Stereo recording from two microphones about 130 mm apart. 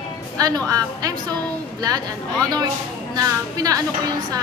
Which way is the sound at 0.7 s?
30° right (ahead or behind).